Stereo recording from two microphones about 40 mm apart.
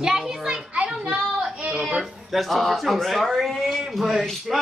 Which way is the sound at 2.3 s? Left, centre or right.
Centre.